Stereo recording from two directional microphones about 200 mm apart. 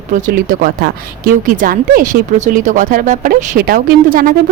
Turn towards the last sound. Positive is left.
turn(degrees=-45)  # may be behind; listen again after turning